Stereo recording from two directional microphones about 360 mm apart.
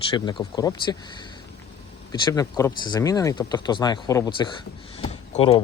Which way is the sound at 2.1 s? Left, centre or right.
Centre.